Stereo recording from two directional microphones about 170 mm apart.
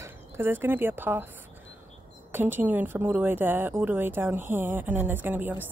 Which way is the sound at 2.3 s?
10° right (ahead or behind).